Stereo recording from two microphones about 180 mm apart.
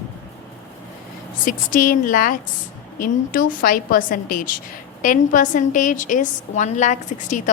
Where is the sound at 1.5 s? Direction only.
50° left (ahead or behind).